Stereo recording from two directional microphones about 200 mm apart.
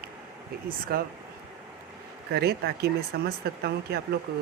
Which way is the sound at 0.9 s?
50° right (ahead or behind).